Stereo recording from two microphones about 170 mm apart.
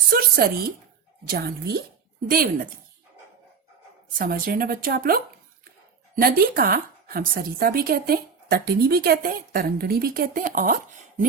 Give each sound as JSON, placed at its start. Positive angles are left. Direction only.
{"t": 0.1, "sound": "a sound", "side_deg": -60}
{"t": 1.2, "sound": "a woman's voice", "side_deg": -60}
{"t": 4.1, "sound": "a woman's voice", "side_deg": -55}